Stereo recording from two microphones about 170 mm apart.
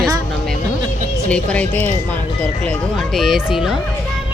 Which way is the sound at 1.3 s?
5° left (ahead or behind).